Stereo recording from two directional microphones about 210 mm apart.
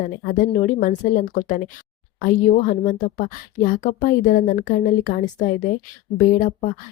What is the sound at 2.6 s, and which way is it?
Speech, 35° left (ahead or behind).